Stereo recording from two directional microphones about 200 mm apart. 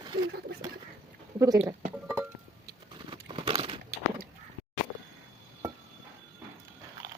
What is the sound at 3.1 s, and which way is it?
Crunch, 25° right (ahead or behind).